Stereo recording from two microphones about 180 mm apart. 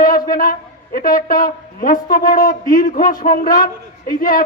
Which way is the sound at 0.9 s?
50° left (ahead or behind).